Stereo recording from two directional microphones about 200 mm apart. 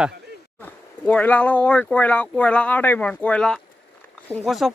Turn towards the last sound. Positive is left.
turn(degrees=0)  # may be behind; listen again after turning